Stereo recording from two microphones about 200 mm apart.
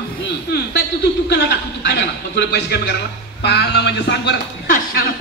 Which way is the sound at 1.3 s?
55° left (ahead or behind).